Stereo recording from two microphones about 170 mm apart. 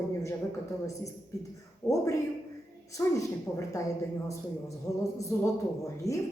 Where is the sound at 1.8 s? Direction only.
15° left (ahead or behind).